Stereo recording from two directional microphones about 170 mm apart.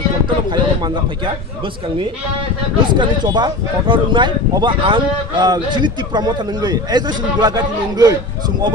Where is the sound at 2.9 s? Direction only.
25° right (ahead or behind).